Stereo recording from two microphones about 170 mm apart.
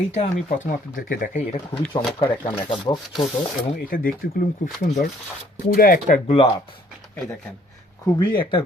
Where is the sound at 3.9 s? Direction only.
55° left (ahead or behind).